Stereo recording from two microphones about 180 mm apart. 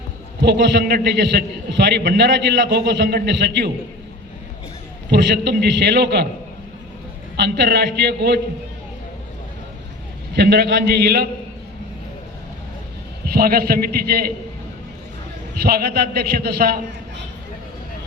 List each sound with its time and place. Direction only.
0.4 s a man's voice: 70° right (ahead or behind)
5.0 s a man's voice: 70° right (ahead or behind)
7.3 s a man's voice: 70° right (ahead or behind)
10.3 s a man's voice: 65° right (ahead or behind)
13.2 s a man's voice: 60° right (ahead or behind)
15.6 s a man's voice: 60° right (ahead or behind)